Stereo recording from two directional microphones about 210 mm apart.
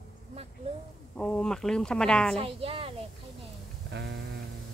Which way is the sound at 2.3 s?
25° right (ahead or behind).